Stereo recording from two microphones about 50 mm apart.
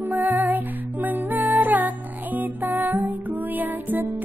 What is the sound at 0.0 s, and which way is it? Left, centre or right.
Music, right.